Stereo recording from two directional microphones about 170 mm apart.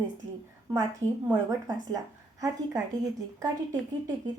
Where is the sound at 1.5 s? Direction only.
20° right (ahead or behind).